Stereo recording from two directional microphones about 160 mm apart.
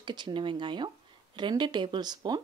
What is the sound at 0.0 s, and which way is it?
Speech, 30° right (ahead or behind).